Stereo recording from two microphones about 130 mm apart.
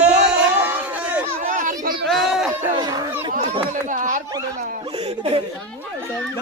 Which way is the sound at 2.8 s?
30° right (ahead or behind).